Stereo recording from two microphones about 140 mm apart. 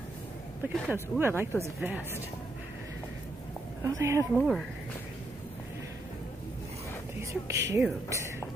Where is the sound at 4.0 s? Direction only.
20° right (ahead or behind).